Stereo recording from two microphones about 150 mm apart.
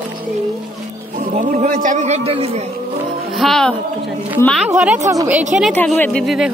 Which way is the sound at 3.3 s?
Centre (ahead or behind).